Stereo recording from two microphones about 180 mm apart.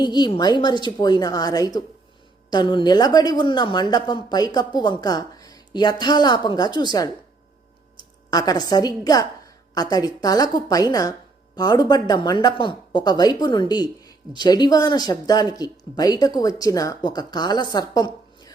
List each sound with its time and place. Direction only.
0.0 s speech: 25° left (ahead or behind)
8.3 s speech: 20° left (ahead or behind)